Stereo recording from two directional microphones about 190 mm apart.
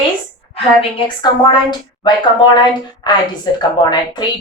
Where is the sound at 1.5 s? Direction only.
25° left (ahead or behind).